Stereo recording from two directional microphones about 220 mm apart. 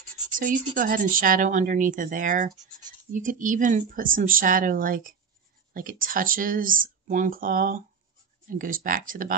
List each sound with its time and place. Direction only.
0.7 s speech: 40° right (ahead or behind)